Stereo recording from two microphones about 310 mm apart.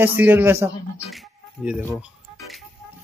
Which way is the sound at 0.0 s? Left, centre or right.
Centre.